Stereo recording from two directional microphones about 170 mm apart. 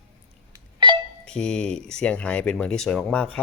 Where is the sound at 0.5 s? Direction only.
25° right (ahead or behind).